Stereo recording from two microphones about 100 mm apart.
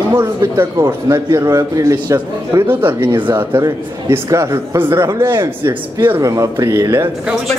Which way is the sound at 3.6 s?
30° right (ahead or behind).